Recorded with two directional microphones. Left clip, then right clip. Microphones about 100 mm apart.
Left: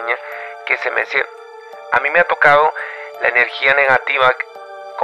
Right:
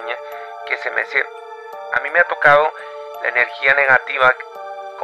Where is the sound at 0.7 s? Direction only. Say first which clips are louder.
Left 3 dB; 20° left (ahead or behind).